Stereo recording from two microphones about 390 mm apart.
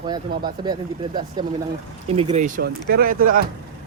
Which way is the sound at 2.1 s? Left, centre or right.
Centre.